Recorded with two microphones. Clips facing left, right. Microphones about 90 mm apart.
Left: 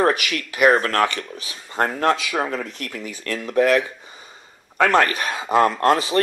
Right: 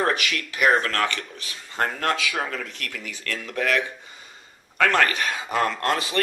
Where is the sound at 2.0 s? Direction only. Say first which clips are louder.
Left 5 dB; 25° left (ahead or behind).